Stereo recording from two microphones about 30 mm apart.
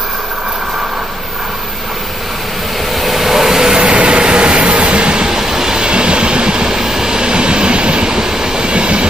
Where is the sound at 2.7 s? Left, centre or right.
Centre.